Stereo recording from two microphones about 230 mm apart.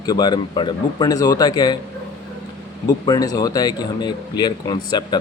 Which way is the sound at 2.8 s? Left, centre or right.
Centre.